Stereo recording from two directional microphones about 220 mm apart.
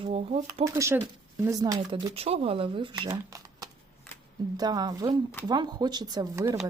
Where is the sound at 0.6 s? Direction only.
15° right (ahead or behind).